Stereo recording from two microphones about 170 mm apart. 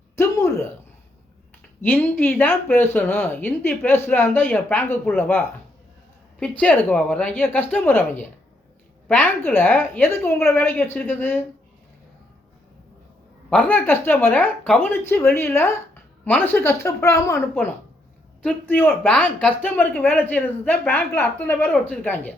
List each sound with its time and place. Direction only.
0.2 s a sound: 15° left (ahead or behind)
1.8 s speech: 10° left (ahead or behind)
6.6 s speech: 10° left (ahead or behind)
9.0 s speech: 10° left (ahead or behind)
13.5 s speech: 5° left (ahead or behind)